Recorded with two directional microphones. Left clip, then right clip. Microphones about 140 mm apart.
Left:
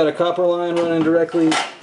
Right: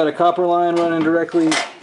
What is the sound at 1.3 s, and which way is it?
Dishes, 15° right (ahead or behind).